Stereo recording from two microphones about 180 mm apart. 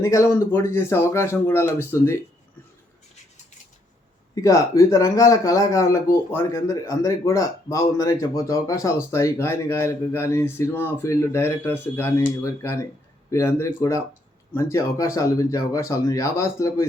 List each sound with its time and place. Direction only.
0.0 s speech: 15° left (ahead or behind)
4.4 s speech: 20° left (ahead or behind)